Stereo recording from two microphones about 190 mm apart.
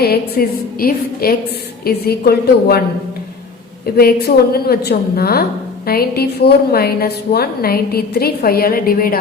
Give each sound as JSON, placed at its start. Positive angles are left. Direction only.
{"t": 0.0, "sound": "a woman's voice", "side_deg": 55}
{"t": 3.9, "sound": "a woman's voice", "side_deg": 55}